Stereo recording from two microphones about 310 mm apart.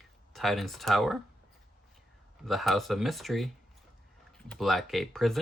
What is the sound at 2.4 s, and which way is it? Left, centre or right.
Speech, centre.